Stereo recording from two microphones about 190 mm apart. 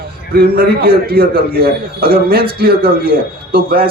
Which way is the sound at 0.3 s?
55° right (ahead or behind).